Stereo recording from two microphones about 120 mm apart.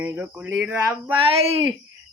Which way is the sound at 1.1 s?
55° right (ahead or behind).